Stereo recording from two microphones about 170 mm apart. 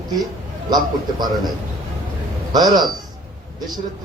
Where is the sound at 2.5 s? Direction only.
25° right (ahead or behind).